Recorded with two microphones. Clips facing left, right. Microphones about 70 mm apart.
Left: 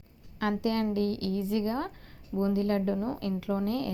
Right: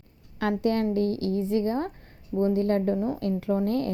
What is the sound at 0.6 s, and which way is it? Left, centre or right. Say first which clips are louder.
A woman's voice: right 5 dB; right.